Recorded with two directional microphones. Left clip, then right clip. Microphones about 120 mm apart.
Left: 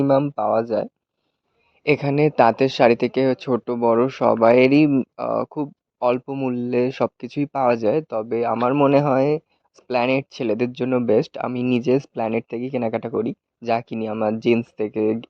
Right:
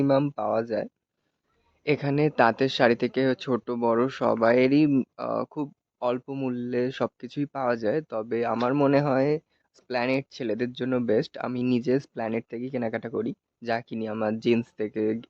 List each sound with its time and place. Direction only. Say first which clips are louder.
0.0 s speech: left 5 dB; 20° left (ahead or behind)
6.1 s speech: left 7 dB; 40° left (ahead or behind); by 8.9 s 20° left (ahead or behind)
8.9 s speech: left 5 dB; 35° left (ahead or behind)